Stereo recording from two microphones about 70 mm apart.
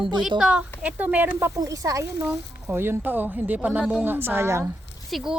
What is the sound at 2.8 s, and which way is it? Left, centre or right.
A woman's voice, right.